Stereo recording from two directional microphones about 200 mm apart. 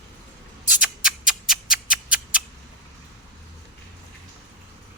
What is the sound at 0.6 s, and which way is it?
Music, 5° right (ahead or behind).